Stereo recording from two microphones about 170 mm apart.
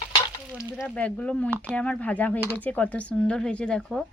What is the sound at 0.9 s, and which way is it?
Speech, 10° left (ahead or behind).